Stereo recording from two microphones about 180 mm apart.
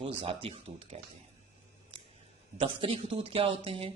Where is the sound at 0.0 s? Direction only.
30° right (ahead or behind).